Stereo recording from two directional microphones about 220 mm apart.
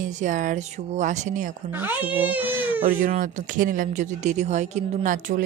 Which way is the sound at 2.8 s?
35° right (ahead or behind).